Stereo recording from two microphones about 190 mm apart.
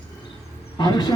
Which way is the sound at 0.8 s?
20° left (ahead or behind).